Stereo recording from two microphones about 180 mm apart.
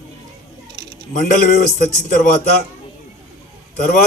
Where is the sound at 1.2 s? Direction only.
50° left (ahead or behind).